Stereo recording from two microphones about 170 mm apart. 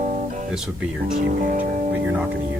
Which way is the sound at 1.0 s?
50° right (ahead or behind).